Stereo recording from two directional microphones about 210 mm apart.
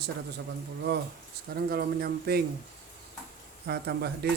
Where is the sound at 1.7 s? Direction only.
50° right (ahead or behind).